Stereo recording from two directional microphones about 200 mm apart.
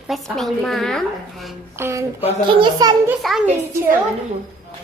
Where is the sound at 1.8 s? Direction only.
10° right (ahead or behind).